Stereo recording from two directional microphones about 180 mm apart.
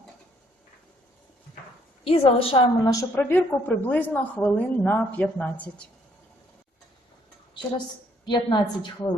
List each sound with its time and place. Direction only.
2.0 s a woman's voice: 30° left (ahead or behind)
3.0 s speech: 10° left (ahead or behind)
8.2 s a woman's voice: 25° left (ahead or behind)